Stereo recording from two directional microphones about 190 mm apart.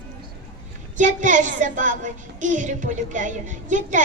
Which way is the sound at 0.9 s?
40° right (ahead or behind).